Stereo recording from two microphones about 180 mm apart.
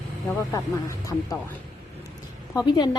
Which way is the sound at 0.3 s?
20° left (ahead or behind).